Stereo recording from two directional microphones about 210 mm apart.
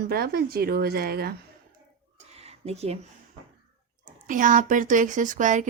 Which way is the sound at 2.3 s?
30° right (ahead or behind).